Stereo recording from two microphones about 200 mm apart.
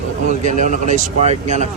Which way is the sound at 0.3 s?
40° right (ahead or behind).